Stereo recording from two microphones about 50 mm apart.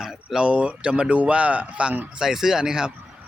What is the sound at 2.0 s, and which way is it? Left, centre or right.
Speech, centre.